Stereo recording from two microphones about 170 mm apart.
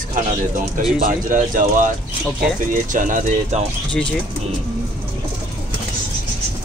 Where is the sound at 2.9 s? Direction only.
50° right (ahead or behind).